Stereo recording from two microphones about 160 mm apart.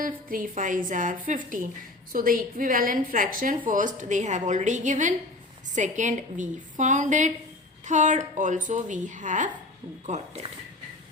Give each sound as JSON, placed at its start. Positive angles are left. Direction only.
{"t": 0.0, "sound": "a woman's voice", "side_deg": -60}